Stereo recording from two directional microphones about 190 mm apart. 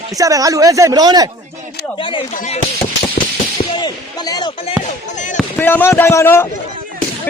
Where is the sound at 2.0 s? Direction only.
25° left (ahead or behind).